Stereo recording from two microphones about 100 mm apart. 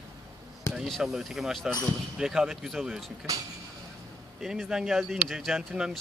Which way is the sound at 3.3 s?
35° right (ahead or behind).